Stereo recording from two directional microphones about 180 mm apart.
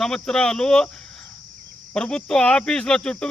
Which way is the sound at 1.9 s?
5° left (ahead or behind).